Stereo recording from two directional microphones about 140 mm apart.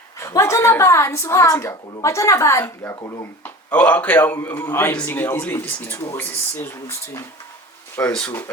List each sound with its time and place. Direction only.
0.2 s a woman's voice: 20° left (ahead or behind)
7.9 s speech: 10° left (ahead or behind)